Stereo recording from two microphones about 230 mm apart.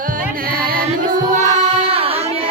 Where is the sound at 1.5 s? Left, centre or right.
Right.